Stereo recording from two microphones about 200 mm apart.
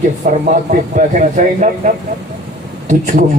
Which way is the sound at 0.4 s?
40° right (ahead or behind).